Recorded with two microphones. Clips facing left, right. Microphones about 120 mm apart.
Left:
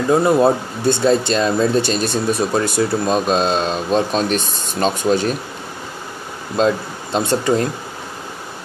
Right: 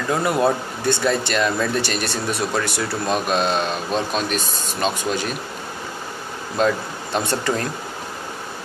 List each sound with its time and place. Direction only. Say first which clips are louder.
0.1 s speech: left 5 dB; 25° left (ahead or behind)
6.6 s speech: left 3 dB; 25° left (ahead or behind)